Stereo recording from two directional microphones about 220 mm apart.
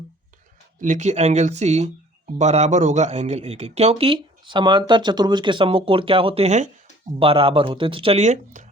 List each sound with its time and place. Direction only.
0.8 s speech: 35° right (ahead or behind)